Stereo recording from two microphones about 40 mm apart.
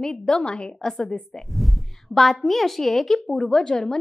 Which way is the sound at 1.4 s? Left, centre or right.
Centre.